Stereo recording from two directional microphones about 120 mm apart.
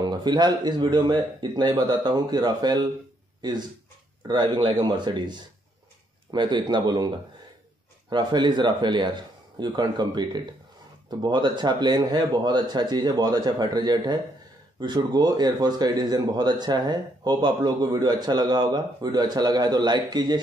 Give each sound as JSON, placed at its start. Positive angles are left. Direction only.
{"t": 0.0, "sound": "speech", "side_deg": -35}
{"t": 8.1, "sound": "speech", "side_deg": -40}